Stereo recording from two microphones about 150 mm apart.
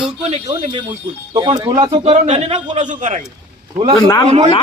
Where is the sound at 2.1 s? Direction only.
50° right (ahead or behind).